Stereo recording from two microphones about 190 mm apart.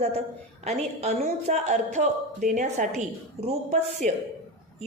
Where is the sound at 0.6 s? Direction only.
35° right (ahead or behind).